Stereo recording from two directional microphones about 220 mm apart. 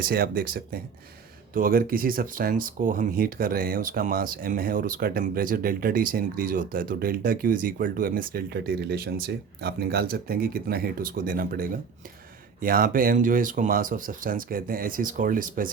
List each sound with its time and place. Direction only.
0.0 s speech: 40° right (ahead or behind)